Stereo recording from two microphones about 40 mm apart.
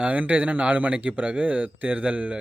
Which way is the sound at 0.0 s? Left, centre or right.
Right.